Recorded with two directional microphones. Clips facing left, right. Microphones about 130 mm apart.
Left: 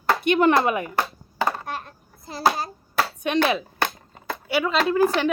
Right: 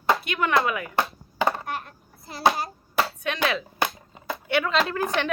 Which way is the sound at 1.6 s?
30° left (ahead or behind).